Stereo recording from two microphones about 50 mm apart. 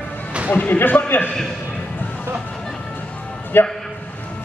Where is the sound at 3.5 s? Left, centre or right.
Left.